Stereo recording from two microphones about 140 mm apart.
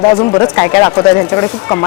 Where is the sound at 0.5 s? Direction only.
20° left (ahead or behind).